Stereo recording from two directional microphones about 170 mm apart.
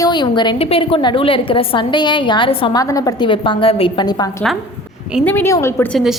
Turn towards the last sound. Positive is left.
turn(degrees=0)  # may be behind; listen again after turning